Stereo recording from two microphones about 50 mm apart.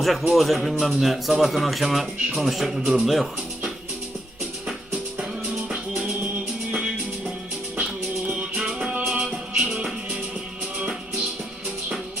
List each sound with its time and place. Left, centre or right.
0.0 s a man's voice: centre
8.8 s music: right